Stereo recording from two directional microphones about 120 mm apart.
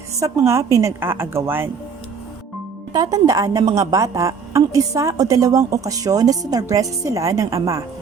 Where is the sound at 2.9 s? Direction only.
30° right (ahead or behind).